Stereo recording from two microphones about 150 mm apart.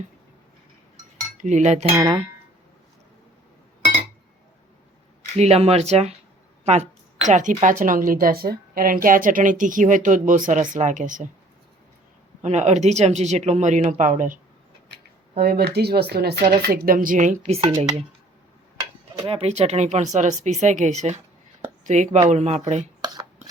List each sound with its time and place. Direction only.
1.4 s speech: 50° right (ahead or behind)
5.4 s a woman's voice: 45° right (ahead or behind); by 11.3 s 60° right (ahead or behind)
12.4 s a woman's voice: 50° right (ahead or behind)
15.4 s speech: 90° right; by 17.7 s 45° right (ahead or behind)
19.3 s speech: 45° right (ahead or behind)
23.0 s a sound: 25° right (ahead or behind)